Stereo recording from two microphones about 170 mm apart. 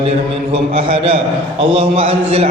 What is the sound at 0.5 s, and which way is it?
Speech, 35° right (ahead or behind).